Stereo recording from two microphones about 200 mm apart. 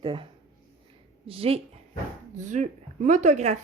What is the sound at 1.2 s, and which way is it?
A woman's voice, 30° right (ahead or behind).